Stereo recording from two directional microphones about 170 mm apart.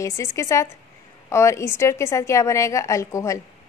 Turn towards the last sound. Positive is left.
turn(degrees=20)  # may be behind; listen again after turning